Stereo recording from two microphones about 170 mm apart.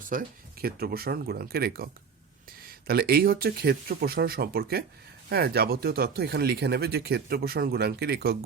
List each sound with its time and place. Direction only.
0.0 s speech: 55° right (ahead or behind)